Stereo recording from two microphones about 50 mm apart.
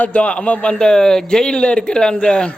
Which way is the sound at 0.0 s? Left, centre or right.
Left.